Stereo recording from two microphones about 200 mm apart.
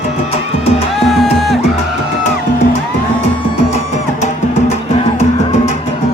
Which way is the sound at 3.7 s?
35° left (ahead or behind).